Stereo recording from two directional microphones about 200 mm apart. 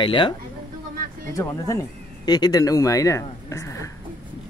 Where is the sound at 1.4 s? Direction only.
15° left (ahead or behind).